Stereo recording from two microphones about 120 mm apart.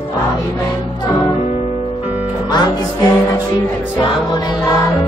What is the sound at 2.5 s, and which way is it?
Music, 35° left (ahead or behind).